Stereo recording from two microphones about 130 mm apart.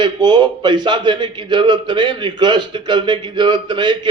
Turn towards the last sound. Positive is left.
turn(degrees=-35)  # may be behind; listen again after turning